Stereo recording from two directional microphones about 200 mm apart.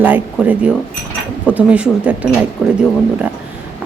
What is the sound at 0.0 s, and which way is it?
A woman's voice, 10° right (ahead or behind).